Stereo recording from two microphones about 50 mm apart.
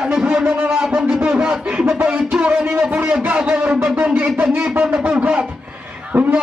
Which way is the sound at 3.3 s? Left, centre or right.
Right.